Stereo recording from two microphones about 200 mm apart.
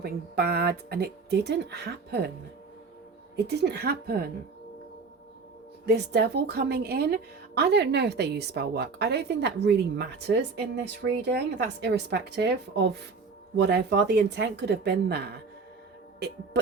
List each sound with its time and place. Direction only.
0.0 s speech: 55° right (ahead or behind)
3.3 s a woman's voice: 55° right (ahead or behind)
5.8 s a woman's voice: 55° right (ahead or behind)